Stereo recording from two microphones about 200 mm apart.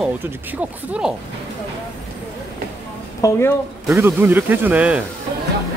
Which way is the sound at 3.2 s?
15° left (ahead or behind).